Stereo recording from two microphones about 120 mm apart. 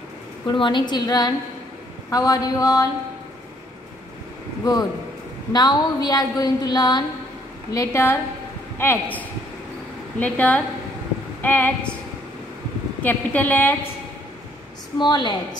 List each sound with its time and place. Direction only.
0.5 s a woman's voice: 40° left (ahead or behind)
5.5 s a woman's voice: 35° left (ahead or behind); by 11.9 s 15° left (ahead or behind)
13.0 s a woman's voice: 15° left (ahead or behind)
15.0 s a woman's voice: 40° left (ahead or behind)